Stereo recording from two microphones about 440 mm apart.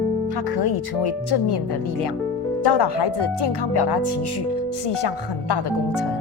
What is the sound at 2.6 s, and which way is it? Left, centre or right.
Speech, left.